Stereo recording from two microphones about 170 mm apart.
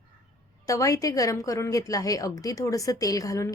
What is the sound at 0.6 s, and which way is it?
A woman's voice, 20° left (ahead or behind).